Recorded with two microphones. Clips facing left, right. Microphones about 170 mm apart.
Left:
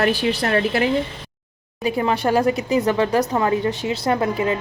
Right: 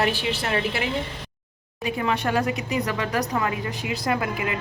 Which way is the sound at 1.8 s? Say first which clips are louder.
Left 5 dB; 35° left (ahead or behind).